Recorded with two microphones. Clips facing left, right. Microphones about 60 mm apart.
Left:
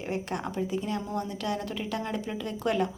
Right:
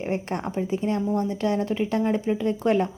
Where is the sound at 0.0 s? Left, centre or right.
Right.